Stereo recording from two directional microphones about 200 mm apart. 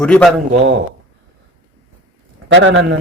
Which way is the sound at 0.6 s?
65° right (ahead or behind).